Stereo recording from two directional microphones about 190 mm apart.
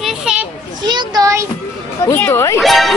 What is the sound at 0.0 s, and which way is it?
Children playing, 5° right (ahead or behind).